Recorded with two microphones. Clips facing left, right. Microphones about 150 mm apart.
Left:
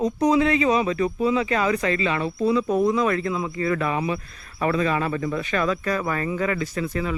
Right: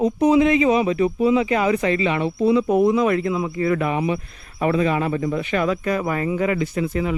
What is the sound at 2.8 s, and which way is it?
Speech, 25° right (ahead or behind).